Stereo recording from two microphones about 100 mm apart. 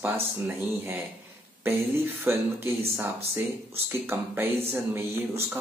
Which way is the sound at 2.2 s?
20° right (ahead or behind).